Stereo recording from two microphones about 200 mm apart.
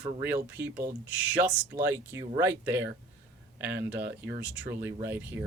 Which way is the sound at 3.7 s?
55° right (ahead or behind).